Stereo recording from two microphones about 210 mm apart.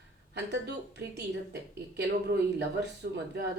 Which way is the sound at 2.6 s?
55° right (ahead or behind).